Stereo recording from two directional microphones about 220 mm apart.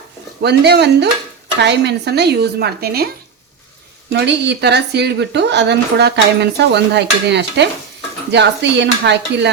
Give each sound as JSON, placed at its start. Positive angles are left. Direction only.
{"t": 0.4, "sound": "a woman's voice", "side_deg": -50}
{"t": 4.1, "sound": "a woman's voice", "side_deg": -50}